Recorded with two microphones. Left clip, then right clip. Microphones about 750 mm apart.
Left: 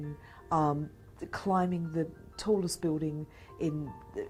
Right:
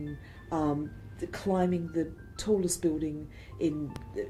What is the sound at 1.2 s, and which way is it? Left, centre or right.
A woman's voice, left.